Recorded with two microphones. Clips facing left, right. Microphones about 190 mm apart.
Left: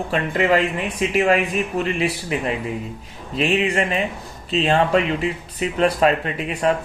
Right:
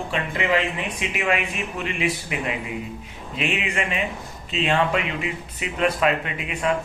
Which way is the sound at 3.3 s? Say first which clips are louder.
Left 7 dB; 35° left (ahead or behind).